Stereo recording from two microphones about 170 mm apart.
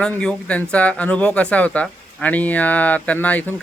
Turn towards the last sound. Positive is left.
turn(degrees=10)  # may be behind; listen again after turning